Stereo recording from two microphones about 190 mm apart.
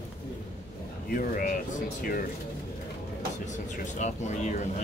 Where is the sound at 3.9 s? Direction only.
40° left (ahead or behind).